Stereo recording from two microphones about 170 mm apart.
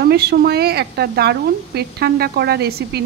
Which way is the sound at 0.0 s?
70° right (ahead or behind).